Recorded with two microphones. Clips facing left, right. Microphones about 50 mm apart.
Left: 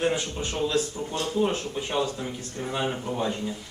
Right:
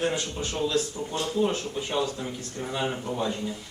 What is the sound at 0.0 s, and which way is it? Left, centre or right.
Speech, centre.